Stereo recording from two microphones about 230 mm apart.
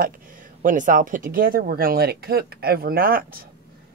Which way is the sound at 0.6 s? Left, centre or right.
Right.